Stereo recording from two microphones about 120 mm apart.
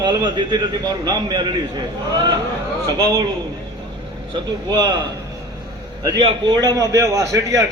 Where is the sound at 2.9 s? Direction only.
30° right (ahead or behind).